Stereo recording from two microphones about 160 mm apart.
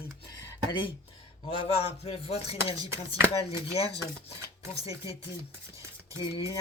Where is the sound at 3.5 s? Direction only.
35° left (ahead or behind).